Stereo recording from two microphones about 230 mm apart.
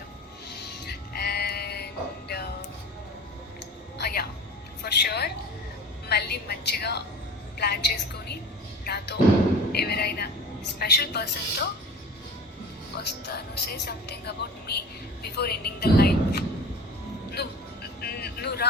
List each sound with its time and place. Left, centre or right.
0.5 s music: left
3.9 s music: left
4.8 s a sound: left
8.8 s music: left
9.7 s a sound: left
13.0 s music: left
15.2 s a sound: left
17.4 s music: left
18.0 s vehicle: left